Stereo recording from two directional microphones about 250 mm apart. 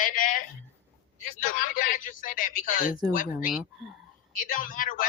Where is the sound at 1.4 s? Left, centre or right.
Left.